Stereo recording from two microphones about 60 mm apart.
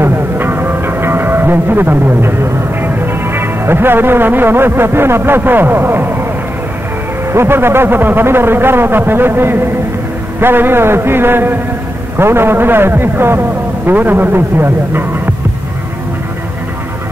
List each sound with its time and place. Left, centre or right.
0.0 s music: right
2.8 s speech: right
7.3 s a man's voice: right